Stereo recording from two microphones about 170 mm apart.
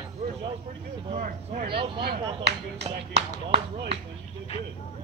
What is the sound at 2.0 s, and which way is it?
Speech, 75° right (ahead or behind).